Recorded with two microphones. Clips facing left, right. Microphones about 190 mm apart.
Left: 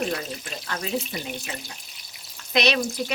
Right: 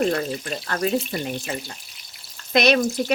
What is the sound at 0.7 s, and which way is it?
Speech, 55° right (ahead or behind).